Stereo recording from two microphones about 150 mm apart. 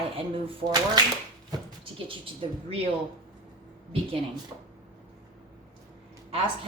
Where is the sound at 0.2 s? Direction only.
35° right (ahead or behind).